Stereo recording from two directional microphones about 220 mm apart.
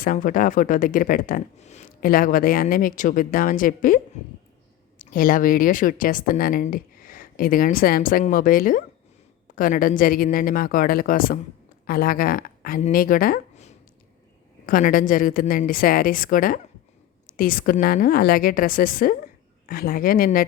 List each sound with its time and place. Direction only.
0.0 s speech: 40° left (ahead or behind)